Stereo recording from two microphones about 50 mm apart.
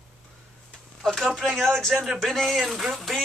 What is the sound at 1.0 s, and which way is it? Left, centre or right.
Speech, centre.